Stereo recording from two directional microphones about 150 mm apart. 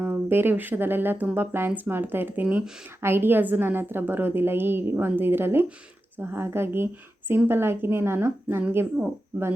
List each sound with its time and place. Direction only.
0.0 s speech: 15° right (ahead or behind)